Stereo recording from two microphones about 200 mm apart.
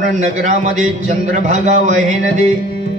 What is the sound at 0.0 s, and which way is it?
A man's voice, 40° right (ahead or behind).